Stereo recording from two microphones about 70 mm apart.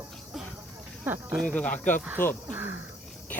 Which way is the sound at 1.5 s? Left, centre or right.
Left.